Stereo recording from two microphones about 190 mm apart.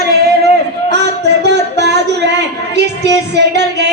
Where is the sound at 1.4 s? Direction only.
60° right (ahead or behind).